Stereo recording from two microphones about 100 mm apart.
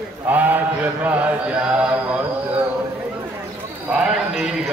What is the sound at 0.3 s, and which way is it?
Speech, 15° right (ahead or behind).